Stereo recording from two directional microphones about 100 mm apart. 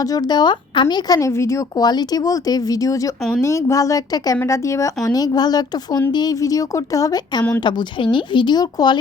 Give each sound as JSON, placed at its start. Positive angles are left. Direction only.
{"t": 0.0, "sound": "speech", "side_deg": 40}
{"t": 1.3, "sound": "speech", "side_deg": 30}
{"t": 7.6, "sound": "speech", "side_deg": 50}